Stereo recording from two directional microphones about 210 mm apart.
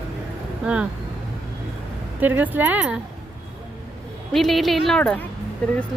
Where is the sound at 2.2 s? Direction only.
10° right (ahead or behind).